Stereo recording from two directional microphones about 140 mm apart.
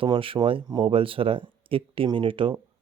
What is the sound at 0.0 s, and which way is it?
Speech, 40° right (ahead or behind).